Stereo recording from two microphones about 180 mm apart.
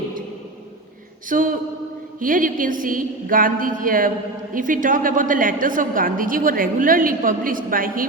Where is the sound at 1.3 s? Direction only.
50° right (ahead or behind).